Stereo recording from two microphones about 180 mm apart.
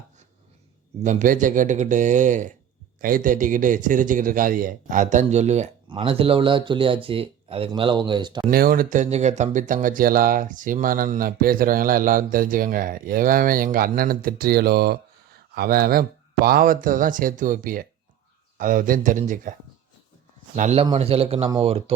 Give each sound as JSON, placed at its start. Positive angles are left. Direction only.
{"t": 1.0, "sound": "speech", "side_deg": -45}
{"t": 8.4, "sound": "speech", "side_deg": -55}
{"t": 20.6, "sound": "speech", "side_deg": -40}